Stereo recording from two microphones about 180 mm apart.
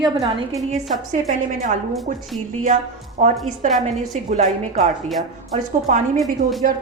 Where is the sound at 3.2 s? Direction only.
45° right (ahead or behind).